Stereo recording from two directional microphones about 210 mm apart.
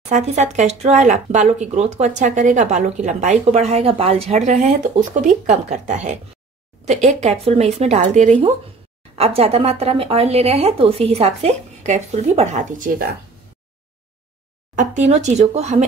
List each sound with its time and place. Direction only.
0.1 s speech: 35° right (ahead or behind)
14.8 s speech: 35° right (ahead or behind)